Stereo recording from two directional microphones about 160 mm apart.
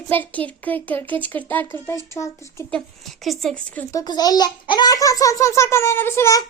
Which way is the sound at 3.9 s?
25° left (ahead or behind).